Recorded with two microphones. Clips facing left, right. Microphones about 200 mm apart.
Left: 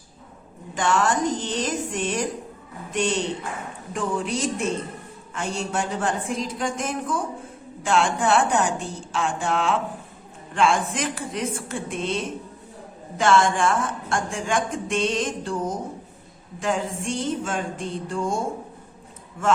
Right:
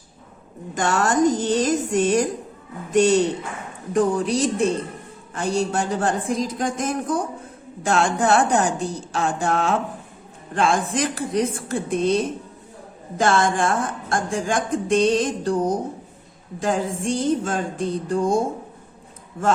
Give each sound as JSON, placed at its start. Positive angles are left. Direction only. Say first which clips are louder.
{"t": 0.8, "sound": "a woman's voice", "louder": "right 3 dB", "side_deg": -40}